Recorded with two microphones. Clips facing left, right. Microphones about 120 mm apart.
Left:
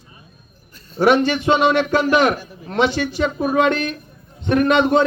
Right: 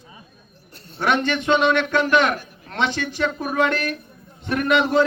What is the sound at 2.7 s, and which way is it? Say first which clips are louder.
A man's voice: left 5 dB; 15° left (ahead or behind).